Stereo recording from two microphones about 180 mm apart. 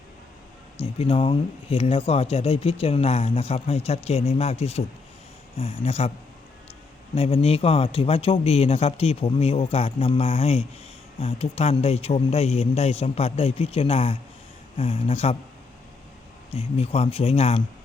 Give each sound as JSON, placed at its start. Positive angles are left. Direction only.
{"t": 0.8, "sound": "speech", "side_deg": 35}
{"t": 7.2, "sound": "speech", "side_deg": 35}
{"t": 16.6, "sound": "speech", "side_deg": 35}